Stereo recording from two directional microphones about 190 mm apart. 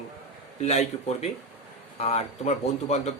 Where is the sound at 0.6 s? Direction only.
35° left (ahead or behind).